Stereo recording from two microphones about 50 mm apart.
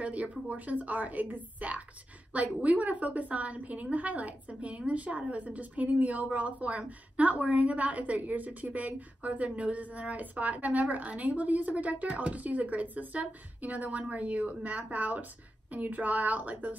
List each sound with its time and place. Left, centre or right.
0.0 s a woman's voice: right